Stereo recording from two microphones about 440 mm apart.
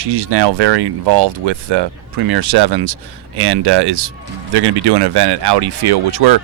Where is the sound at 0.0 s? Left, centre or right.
Right.